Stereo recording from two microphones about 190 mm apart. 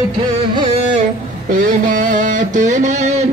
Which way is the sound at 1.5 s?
45° right (ahead or behind).